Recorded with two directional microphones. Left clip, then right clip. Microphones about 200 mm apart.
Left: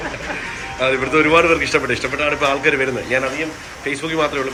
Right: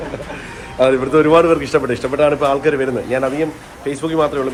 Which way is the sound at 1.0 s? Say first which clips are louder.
Even; 10° right (ahead or behind).